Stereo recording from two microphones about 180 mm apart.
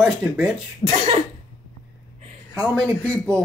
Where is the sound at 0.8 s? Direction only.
20° left (ahead or behind).